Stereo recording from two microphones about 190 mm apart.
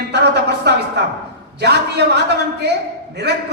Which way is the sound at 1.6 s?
60° right (ahead or behind).